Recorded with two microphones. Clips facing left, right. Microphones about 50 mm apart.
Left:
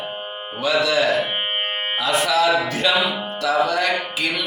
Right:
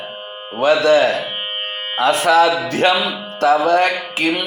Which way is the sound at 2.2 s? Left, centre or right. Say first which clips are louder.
Right 4 dB; right.